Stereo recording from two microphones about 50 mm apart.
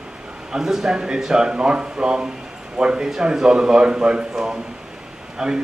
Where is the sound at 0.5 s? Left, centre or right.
Centre.